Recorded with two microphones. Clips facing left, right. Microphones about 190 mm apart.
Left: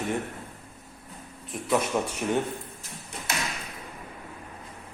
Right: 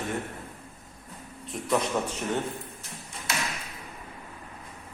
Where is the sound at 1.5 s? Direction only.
10° left (ahead or behind).